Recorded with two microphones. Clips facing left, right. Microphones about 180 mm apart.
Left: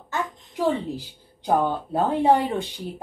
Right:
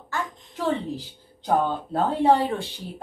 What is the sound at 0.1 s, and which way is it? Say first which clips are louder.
A woman's voice: left 2 dB; 15° left (ahead or behind).